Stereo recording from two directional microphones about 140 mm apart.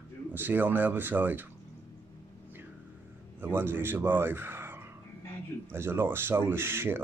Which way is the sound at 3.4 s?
15° right (ahead or behind).